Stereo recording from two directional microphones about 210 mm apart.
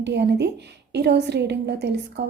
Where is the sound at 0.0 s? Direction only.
55° right (ahead or behind).